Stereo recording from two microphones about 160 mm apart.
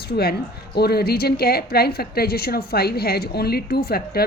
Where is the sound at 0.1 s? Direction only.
75° left (ahead or behind).